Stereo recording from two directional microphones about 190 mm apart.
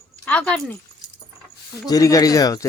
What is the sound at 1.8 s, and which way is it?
Speech, 20° left (ahead or behind).